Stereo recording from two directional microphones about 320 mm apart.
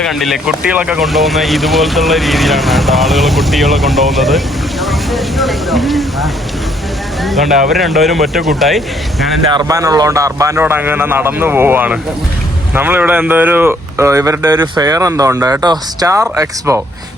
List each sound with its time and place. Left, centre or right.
0.0 s speech: centre
7.3 s speech: centre
9.5 s speech: centre